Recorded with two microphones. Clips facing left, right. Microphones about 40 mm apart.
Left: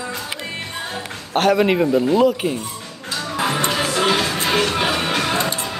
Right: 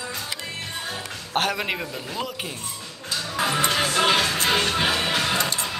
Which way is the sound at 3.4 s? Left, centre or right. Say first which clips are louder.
Left 2 dB; left.